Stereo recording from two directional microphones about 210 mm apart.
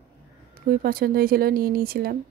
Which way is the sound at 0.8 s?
45° right (ahead or behind).